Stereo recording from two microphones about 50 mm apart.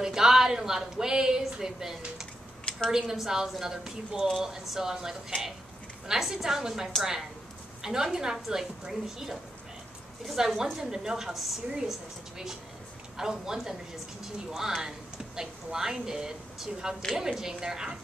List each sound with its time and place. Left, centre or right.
0.0 s a woman's voice: centre